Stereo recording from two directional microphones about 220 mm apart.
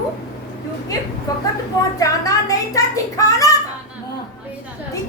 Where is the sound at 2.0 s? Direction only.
15° left (ahead or behind).